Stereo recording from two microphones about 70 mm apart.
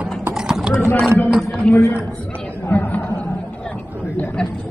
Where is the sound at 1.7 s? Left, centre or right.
Centre.